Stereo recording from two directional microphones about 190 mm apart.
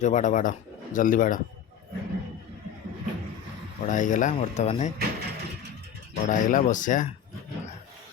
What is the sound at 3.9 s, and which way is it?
Speech, 40° left (ahead or behind).